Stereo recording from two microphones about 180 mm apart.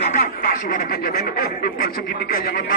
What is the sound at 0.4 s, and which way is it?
Speech, 50° left (ahead or behind).